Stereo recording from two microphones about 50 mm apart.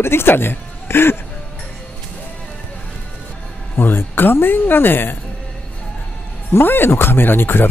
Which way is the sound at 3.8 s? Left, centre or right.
Left.